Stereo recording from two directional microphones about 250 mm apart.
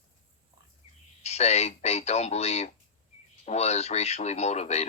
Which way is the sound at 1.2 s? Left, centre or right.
Left.